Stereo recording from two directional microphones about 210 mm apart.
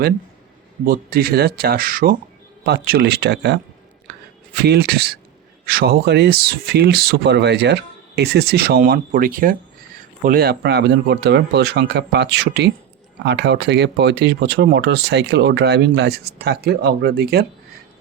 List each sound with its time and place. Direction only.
0.9 s speech: 45° right (ahead or behind)